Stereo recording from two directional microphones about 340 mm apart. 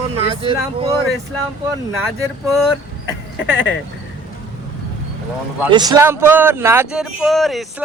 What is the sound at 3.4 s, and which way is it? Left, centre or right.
Speech, left.